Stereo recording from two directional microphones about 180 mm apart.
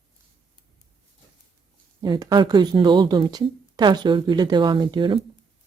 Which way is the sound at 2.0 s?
25° right (ahead or behind).